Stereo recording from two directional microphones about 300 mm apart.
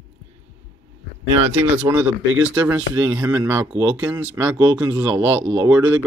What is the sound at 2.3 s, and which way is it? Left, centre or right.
Speech, right.